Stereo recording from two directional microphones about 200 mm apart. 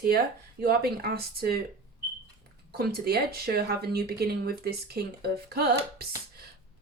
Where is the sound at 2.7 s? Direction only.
50° right (ahead or behind).